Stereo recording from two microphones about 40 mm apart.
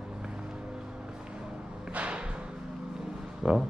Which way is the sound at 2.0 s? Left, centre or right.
Right.